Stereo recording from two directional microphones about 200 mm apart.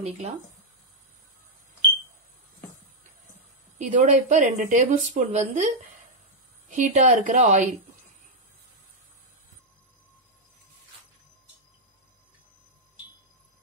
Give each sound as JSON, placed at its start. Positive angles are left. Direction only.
{"t": 3.7, "sound": "speech", "side_deg": -40}